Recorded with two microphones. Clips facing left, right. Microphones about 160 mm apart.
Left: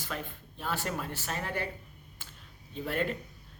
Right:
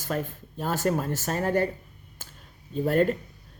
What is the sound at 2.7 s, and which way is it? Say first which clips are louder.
Speech: right 9 dB; 45° right (ahead or behind).